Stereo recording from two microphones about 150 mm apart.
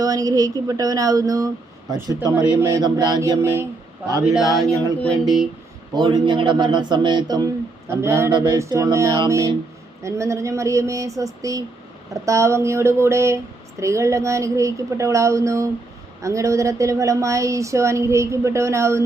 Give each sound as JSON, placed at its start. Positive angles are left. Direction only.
{"t": 0.0, "sound": "speech", "side_deg": -25}
{"t": 4.2, "sound": "speech", "side_deg": -5}
{"t": 5.9, "sound": "speech", "side_deg": -30}
{"t": 8.3, "sound": "speech", "side_deg": -30}